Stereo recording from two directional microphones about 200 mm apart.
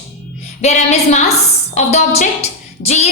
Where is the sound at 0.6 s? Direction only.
35° left (ahead or behind).